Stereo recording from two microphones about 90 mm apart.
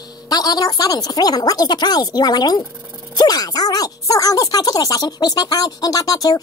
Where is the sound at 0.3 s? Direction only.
45° left (ahead or behind).